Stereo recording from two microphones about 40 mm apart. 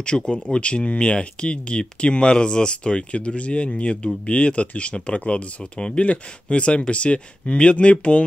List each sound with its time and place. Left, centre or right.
0.0 s speech: left